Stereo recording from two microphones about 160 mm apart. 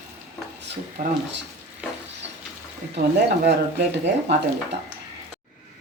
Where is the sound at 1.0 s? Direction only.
55° right (ahead or behind).